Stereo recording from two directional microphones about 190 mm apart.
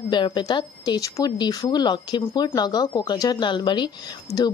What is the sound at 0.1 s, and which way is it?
A woman's voice, 25° left (ahead or behind).